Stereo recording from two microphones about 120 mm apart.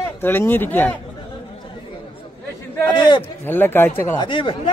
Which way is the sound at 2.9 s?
40° left (ahead or behind).